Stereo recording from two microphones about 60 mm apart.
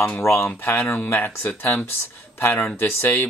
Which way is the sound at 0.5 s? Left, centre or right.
Left.